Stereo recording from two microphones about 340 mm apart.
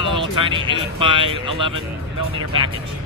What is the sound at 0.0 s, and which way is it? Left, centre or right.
Speech, centre.